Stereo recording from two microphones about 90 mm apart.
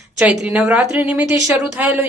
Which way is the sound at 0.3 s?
15° right (ahead or behind).